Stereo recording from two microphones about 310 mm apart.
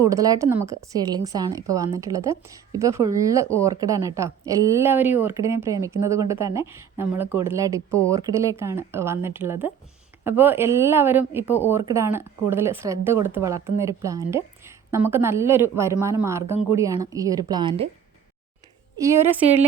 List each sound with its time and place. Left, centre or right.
0.0 s a woman's voice: centre
18.9 s a woman's voice: centre